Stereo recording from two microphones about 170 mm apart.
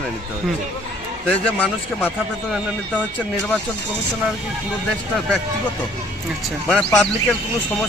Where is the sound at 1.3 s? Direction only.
10° left (ahead or behind).